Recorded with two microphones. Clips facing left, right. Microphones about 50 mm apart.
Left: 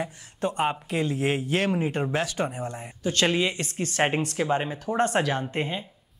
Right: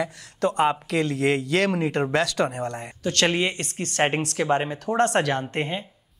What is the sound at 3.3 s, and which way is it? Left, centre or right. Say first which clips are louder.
Speech: right 1 dB; right.